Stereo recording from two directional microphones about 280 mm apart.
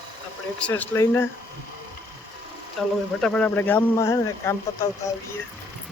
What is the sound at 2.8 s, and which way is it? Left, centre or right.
Speech, centre.